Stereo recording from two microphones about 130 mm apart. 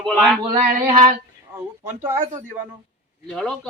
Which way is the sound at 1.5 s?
20° right (ahead or behind).